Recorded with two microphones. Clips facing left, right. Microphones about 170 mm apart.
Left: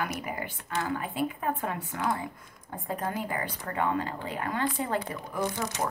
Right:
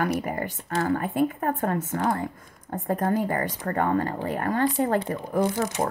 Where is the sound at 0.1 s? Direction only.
45° right (ahead or behind).